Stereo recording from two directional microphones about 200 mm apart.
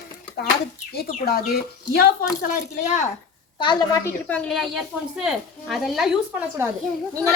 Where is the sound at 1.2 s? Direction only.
50° left (ahead or behind).